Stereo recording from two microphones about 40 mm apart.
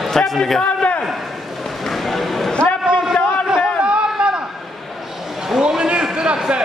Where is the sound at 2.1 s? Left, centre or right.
Centre.